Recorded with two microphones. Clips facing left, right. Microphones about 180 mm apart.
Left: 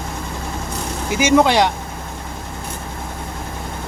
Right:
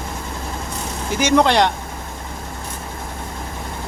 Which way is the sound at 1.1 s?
5° left (ahead or behind).